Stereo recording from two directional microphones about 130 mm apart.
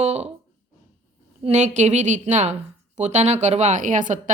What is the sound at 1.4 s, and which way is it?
A woman's voice, 60° right (ahead or behind).